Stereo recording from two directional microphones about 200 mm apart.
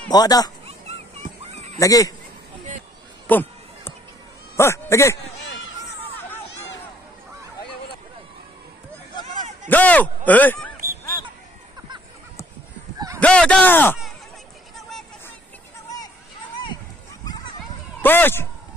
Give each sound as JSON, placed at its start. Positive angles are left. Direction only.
{"t": 0.1, "sound": "speech", "side_deg": 20}
{"t": 0.7, "sound": "a sound", "side_deg": -30}
{"t": 1.8, "sound": "speech", "side_deg": 15}
{"t": 3.3, "sound": "a sound", "side_deg": 10}
{"t": 4.6, "sound": "speech", "side_deg": 15}
{"t": 9.7, "sound": "speech", "side_deg": 10}
{"t": 13.2, "sound": "speech", "side_deg": 5}
{"t": 14.8, "sound": "a sound", "side_deg": 0}
{"t": 18.0, "sound": "speech", "side_deg": 10}